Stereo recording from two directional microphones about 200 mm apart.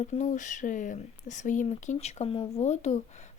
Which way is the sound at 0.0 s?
35° left (ahead or behind).